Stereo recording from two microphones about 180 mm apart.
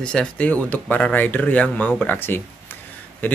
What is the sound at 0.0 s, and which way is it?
Speech, 5° left (ahead or behind).